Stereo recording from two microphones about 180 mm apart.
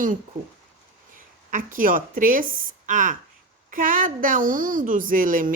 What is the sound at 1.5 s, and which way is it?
A woman's voice, 45° right (ahead or behind).